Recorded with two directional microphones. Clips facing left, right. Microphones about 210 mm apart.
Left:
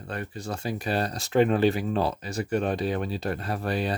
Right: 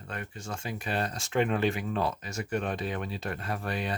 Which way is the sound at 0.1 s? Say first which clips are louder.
Left 5 dB; 35° left (ahead or behind).